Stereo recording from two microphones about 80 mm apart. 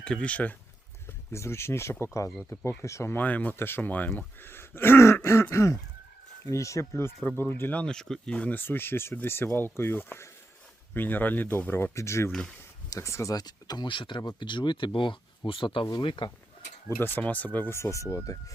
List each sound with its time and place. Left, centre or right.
0.0 s speech: centre
1.3 s throat clearing: left
3.2 s speech: left
4.4 s throat clearing: left
7.3 s speech: left
7.8 s speech: centre; by 11.9 s left
11.9 s throat clearing: left
12.3 s speech: centre
12.9 s throat clearing: left
13.3 s speech: left
17.0 s speech: left
17.7 s throat clearing: left